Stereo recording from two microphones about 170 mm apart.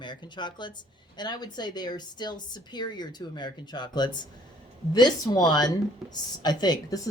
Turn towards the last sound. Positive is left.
turn(degrees=25)  # may be behind; listen again after turning